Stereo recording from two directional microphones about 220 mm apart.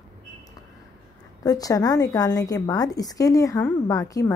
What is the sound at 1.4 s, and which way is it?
Speech, 15° left (ahead or behind).